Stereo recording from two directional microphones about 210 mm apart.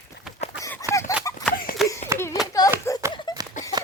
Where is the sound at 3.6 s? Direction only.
35° left (ahead or behind).